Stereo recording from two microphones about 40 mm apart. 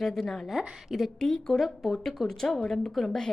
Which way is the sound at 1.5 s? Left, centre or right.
Centre.